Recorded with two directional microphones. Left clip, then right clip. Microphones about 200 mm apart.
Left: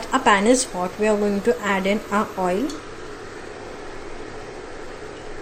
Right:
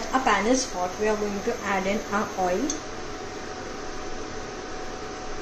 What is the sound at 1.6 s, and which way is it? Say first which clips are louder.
Speech: left 4 dB; 45° left (ahead or behind).